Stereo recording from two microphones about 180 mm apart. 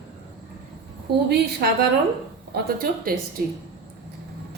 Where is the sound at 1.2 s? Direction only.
65° right (ahead or behind).